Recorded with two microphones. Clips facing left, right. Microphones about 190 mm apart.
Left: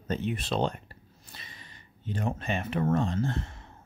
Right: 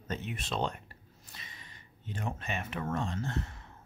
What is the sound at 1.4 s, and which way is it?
Gasp, 35° left (ahead or behind).